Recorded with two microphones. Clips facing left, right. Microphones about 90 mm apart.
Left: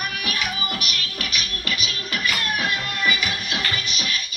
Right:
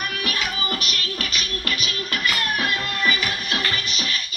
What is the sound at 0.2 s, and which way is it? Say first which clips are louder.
Music: right 1 dB; 15° left (ahead or behind).